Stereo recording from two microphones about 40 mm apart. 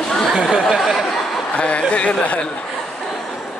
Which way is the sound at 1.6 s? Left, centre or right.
Left.